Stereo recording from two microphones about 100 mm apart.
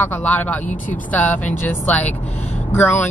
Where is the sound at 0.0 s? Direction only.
15° left (ahead or behind).